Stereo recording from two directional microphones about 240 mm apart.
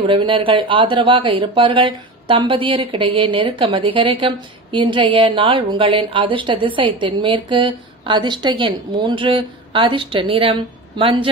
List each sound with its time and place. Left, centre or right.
0.0 s speech: right